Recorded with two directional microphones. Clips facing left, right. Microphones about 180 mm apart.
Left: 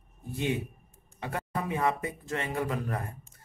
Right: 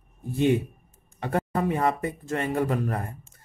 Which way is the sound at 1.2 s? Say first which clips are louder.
Right 8 dB; 55° right (ahead or behind).